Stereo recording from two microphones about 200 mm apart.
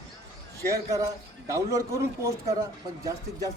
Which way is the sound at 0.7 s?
15° right (ahead or behind).